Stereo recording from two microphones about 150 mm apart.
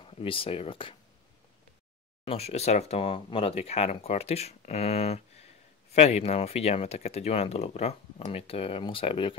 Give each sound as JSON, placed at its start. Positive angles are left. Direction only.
{"t": 0.0, "sound": "speech", "side_deg": 35}
{"t": 2.2, "sound": "speech", "side_deg": 45}